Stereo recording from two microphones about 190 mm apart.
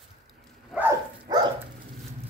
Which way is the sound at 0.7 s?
5° right (ahead or behind).